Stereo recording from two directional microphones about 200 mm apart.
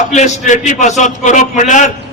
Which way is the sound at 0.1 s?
35° left (ahead or behind).